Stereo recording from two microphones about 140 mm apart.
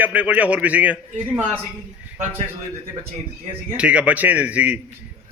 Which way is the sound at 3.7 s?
10° right (ahead or behind).